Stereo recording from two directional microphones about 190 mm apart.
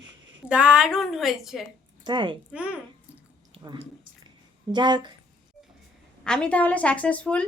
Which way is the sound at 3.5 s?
30° right (ahead or behind).